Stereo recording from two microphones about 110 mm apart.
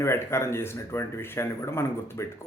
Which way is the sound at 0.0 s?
25° left (ahead or behind).